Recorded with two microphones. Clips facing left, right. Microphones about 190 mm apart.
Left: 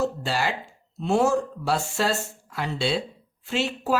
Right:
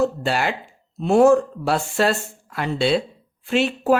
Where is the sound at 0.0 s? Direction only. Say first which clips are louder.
Right 5 dB; 60° right (ahead or behind).